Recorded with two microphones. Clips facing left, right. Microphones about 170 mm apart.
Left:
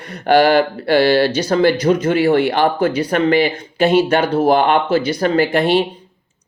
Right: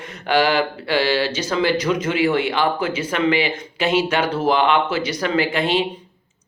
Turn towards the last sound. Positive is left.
turn(degrees=40)  # may be behind; listen again after turning